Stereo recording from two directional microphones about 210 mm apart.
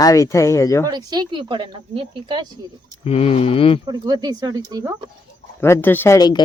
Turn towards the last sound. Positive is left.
turn(degrees=15)  # may be behind; listen again after turning